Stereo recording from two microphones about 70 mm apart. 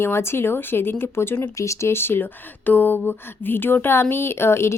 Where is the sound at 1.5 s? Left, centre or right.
Left.